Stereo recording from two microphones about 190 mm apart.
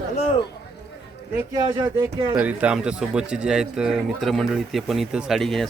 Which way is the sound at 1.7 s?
20° right (ahead or behind).